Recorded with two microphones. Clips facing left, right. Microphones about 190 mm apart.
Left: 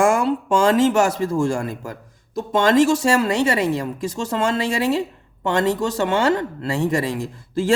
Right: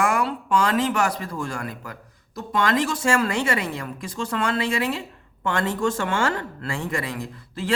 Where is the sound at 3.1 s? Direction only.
25° left (ahead or behind).